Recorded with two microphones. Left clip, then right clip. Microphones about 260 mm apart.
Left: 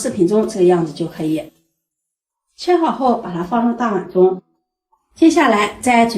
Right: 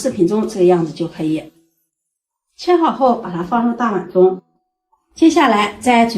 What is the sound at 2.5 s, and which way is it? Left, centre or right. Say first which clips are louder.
Speech: right 1 dB; right.